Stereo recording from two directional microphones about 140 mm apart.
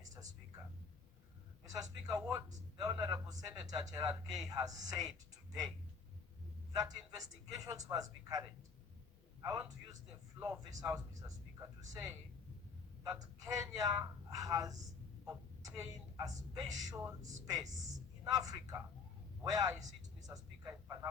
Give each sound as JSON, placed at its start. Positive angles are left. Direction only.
{"t": 0.0, "sound": "a sound", "side_deg": -25}
{"t": 1.6, "sound": "a man's voice", "side_deg": -25}
{"t": 6.7, "sound": "speech", "side_deg": -25}